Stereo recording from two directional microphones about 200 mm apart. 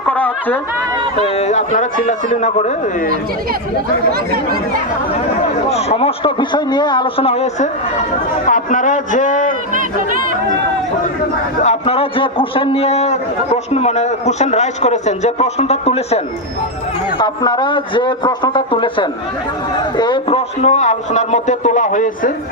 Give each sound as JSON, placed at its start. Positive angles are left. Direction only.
{"t": 0.0, "sound": "a sound", "side_deg": 10}
{"t": 1.2, "sound": "a man's voice", "side_deg": 35}
{"t": 5.6, "sound": "a man's voice", "side_deg": 30}
{"t": 11.6, "sound": "a man's voice", "side_deg": 30}
{"t": 17.2, "sound": "a man's voice", "side_deg": 20}